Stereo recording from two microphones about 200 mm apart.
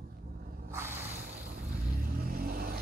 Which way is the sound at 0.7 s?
10° right (ahead or behind).